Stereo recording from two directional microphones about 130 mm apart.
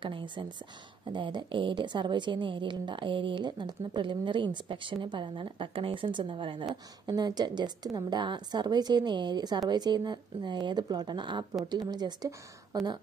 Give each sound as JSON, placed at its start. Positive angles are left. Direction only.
{"t": 0.0, "sound": "a woman's voice", "side_deg": -40}